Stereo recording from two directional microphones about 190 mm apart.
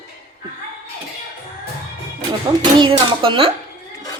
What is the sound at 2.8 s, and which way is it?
Speech, 25° right (ahead or behind).